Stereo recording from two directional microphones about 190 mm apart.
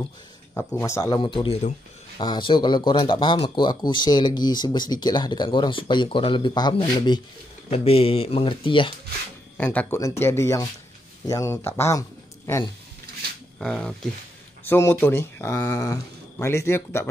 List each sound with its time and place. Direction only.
0.6 s speech: 15° left (ahead or behind)
9.6 s speech: 10° left (ahead or behind)
13.6 s speech: 5° left (ahead or behind)